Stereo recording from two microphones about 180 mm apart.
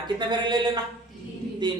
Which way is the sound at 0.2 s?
25° right (ahead or behind).